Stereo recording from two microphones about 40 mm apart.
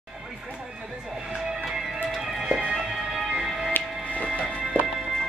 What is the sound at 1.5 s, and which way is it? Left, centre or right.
Music, centre.